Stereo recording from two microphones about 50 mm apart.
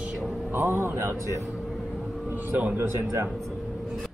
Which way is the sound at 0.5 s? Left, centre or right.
Right.